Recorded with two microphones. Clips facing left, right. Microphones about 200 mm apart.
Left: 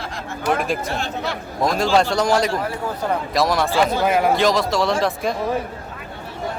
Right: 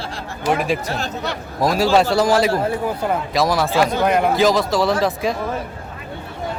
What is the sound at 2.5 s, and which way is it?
Speech, 30° right (ahead or behind).